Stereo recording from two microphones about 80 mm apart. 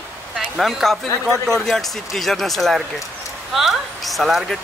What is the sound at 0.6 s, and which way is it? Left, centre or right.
Speech, centre.